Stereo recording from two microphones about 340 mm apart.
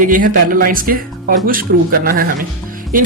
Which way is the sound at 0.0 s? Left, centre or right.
Right.